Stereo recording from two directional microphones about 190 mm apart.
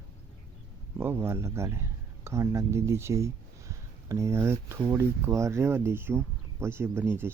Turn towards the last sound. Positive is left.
turn(degrees=-10)  # may be behind; listen again after turning